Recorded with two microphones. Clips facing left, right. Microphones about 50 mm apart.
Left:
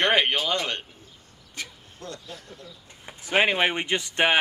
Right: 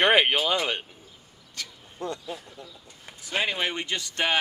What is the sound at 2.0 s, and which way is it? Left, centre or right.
Speech, right.